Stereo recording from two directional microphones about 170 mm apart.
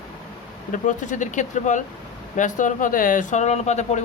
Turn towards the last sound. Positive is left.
turn(degrees=40)  # may be behind; listen again after turning